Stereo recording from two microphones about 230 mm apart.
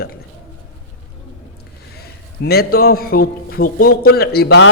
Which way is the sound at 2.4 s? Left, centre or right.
Left.